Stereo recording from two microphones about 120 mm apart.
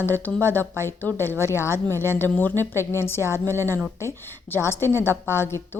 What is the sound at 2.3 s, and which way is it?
Speech, 15° left (ahead or behind).